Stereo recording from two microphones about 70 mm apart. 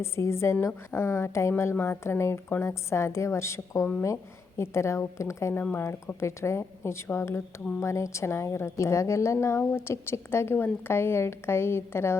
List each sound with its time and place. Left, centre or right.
0.0 s a woman's voice: left
1.7 s a woman's voice: left